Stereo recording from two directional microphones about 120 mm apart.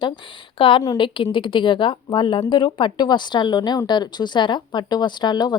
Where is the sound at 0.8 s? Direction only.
35° left (ahead or behind).